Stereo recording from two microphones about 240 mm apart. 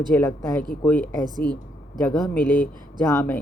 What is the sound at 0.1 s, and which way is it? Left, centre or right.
Speech, centre.